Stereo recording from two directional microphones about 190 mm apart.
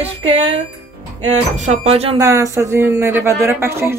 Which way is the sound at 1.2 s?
35° right (ahead or behind).